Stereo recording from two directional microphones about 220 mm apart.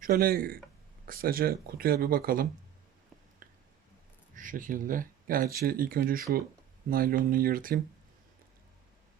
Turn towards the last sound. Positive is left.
turn(degrees=-40)  # may be behind; listen again after turning